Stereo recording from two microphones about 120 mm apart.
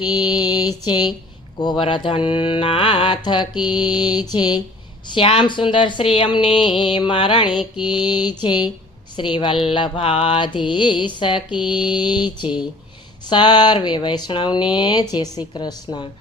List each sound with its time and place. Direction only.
0.0 s mantra: 35° left (ahead or behind)
1.8 s a woman's voice: 50° left (ahead or behind)
3.7 s mantra: 40° left (ahead or behind)
5.0 s a woman's voice: 45° left (ahead or behind)
7.6 s mantra: 40° left (ahead or behind)